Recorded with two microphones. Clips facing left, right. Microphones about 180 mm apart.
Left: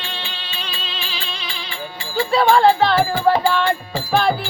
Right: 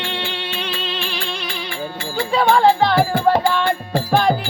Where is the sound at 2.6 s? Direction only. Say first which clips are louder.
Right 1 dB; 10° right (ahead or behind).